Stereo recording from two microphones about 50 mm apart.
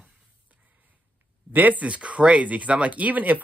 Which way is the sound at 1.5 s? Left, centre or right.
Right.